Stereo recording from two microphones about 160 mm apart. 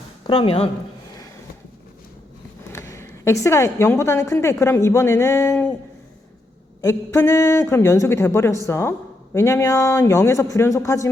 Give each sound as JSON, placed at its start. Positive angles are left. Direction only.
{"t": 0.3, "sound": "speech", "side_deg": 30}
{"t": 2.7, "sound": "speech", "side_deg": 20}
{"t": 6.8, "sound": "speech", "side_deg": 20}